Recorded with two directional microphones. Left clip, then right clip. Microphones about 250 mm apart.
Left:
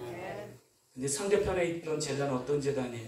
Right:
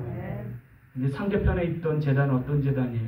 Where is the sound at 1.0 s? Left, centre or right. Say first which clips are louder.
Even; left.